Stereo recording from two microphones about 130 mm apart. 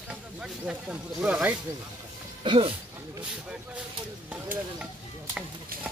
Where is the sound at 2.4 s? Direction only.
40° right (ahead or behind).